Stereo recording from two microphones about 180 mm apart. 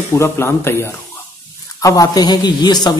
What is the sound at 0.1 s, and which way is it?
A man's voice, 15° left (ahead or behind).